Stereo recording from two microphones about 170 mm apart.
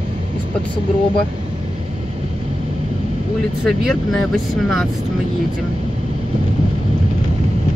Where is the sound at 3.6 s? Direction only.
Centre (ahead or behind).